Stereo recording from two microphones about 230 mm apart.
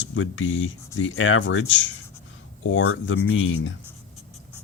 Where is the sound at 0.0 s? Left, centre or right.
Left.